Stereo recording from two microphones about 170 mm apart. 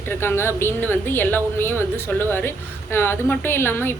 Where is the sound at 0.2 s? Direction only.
15° left (ahead or behind).